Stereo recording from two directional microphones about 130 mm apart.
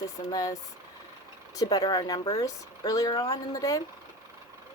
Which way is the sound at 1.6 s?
30° left (ahead or behind).